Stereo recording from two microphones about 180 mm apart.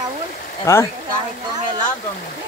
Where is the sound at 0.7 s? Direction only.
15° left (ahead or behind).